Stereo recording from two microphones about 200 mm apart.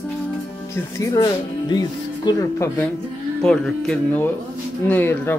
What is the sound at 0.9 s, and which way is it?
Speech, 15° left (ahead or behind).